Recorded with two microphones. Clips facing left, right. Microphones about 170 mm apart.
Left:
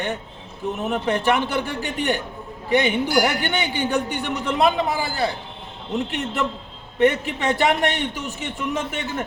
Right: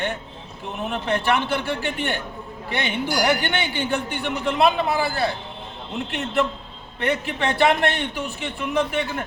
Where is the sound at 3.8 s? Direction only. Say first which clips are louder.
Left 2 dB; 45° left (ahead or behind).